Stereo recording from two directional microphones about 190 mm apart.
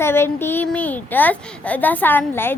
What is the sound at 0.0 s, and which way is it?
A child's voice, 10° left (ahead or behind).